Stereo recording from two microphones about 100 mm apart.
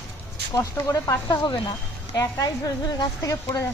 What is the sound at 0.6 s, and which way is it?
A woman's voice, 30° left (ahead or behind).